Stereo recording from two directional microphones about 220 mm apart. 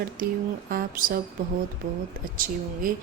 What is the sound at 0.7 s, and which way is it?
Speech, 40° right (ahead or behind).